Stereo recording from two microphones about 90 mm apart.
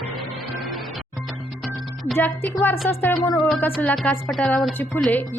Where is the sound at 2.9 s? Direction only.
20° left (ahead or behind).